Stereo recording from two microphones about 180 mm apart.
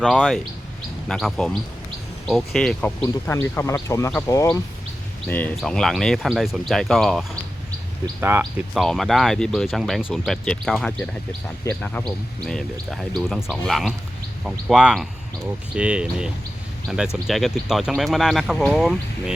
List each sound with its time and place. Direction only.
0.0 s speech: centre (ahead or behind)
8.0 s speech: 15° right (ahead or behind)